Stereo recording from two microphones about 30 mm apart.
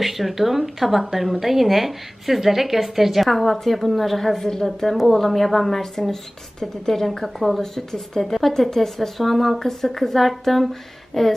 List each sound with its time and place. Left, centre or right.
0.0 s speech: centre
7.6 s speech: centre